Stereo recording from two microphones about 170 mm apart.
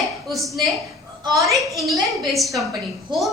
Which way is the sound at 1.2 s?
20° right (ahead or behind).